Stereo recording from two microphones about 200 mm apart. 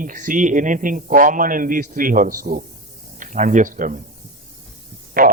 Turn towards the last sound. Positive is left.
turn(degrees=-45)  # may be behind; listen again after turning